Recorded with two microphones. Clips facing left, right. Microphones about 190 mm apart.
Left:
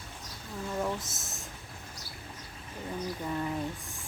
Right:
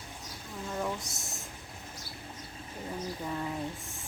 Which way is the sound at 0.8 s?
Centre (ahead or behind).